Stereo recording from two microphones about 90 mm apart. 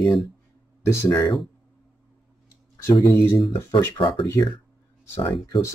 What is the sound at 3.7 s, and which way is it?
Speech, 65° left (ahead or behind).